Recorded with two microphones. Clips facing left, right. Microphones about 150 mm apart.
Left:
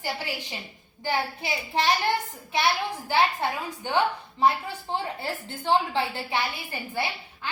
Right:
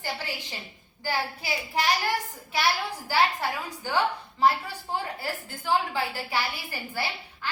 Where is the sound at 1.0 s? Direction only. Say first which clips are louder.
Left 2 dB; 25° left (ahead or behind).